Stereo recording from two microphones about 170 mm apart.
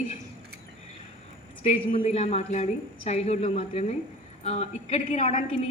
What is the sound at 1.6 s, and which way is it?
A man's voice, 40° left (ahead or behind).